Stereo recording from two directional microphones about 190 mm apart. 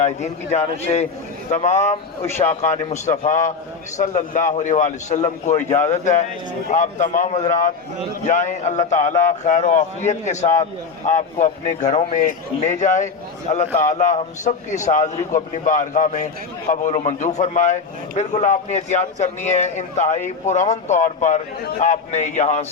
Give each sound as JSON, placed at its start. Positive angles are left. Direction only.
{"t": 0.0, "sound": "a man's voice", "side_deg": 35}
{"t": 21.6, "sound": "a man's voice", "side_deg": 55}
{"t": 21.8, "sound": "a man's voice", "side_deg": 40}